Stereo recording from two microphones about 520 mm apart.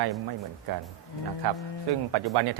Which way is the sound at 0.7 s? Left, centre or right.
Right.